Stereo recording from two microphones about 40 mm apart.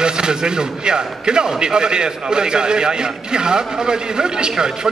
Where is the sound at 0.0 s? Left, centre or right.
Right.